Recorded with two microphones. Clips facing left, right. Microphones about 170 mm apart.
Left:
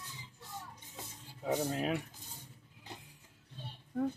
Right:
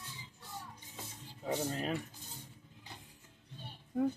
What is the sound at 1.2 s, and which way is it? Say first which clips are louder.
Speech: left 2 dB; 10° left (ahead or behind).